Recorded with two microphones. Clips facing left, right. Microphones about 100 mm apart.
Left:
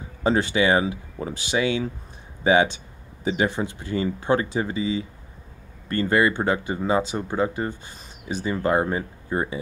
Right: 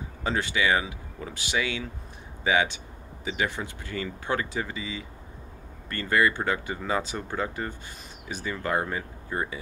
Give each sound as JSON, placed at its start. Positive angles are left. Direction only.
{"t": 0.2, "sound": "speech", "side_deg": 30}